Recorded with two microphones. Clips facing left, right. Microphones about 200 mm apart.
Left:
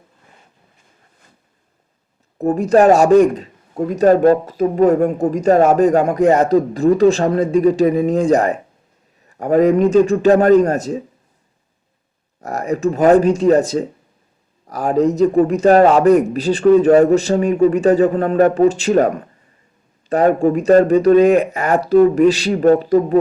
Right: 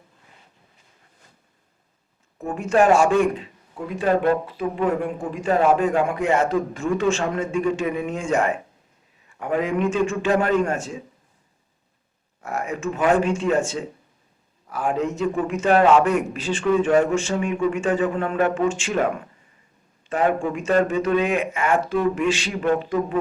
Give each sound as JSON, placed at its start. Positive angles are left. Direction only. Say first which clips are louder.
{"t": 2.4, "sound": "speech", "louder": "left 7 dB", "side_deg": 35}
{"t": 12.4, "sound": "speech", "louder": "left 8 dB", "side_deg": 40}